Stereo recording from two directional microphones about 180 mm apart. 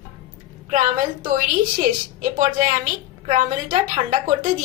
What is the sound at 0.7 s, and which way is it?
A woman's voice, 45° right (ahead or behind).